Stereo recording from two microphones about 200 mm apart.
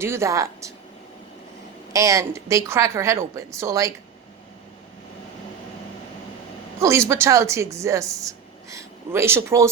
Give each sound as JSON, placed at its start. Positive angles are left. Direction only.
{"t": 0.0, "sound": "a woman's voice", "side_deg": -15}
{"t": 1.9, "sound": "a woman's voice", "side_deg": -15}
{"t": 6.7, "sound": "a woman's voice", "side_deg": -15}